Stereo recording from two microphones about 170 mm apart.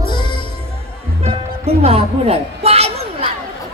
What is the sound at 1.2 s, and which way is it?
Music, 35° right (ahead or behind).